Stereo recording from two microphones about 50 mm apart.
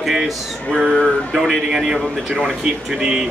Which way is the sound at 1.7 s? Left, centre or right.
Centre.